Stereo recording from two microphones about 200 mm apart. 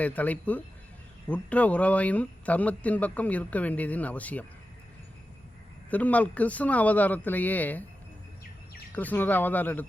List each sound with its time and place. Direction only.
0.0 s speech: 10° left (ahead or behind)
5.9 s speech: 5° left (ahead or behind)
8.9 s speech: 10° left (ahead or behind)